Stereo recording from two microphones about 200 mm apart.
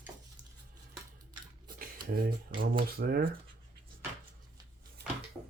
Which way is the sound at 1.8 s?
45° right (ahead or behind).